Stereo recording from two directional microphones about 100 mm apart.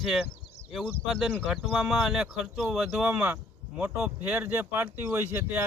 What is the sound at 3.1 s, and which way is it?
Speech, 20° right (ahead or behind).